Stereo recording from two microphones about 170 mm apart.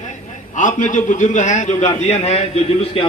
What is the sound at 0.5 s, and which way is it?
A man's voice, 50° left (ahead or behind).